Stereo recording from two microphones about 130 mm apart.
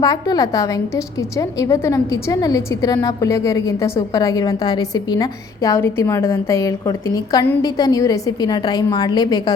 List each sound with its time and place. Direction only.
0.0 s a woman's voice: 30° left (ahead or behind)
5.7 s a woman's voice: 20° left (ahead or behind)